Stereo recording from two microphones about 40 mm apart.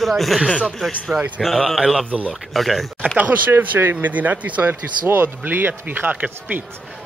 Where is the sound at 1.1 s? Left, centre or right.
Right.